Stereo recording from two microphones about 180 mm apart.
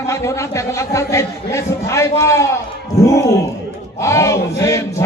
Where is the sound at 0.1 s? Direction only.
15° left (ahead or behind).